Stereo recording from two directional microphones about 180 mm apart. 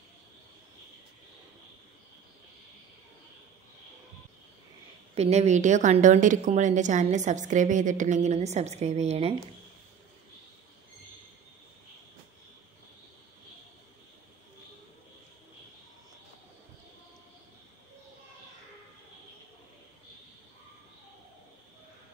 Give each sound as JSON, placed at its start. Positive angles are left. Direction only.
{"t": 5.1, "sound": "a woman's voice", "side_deg": -35}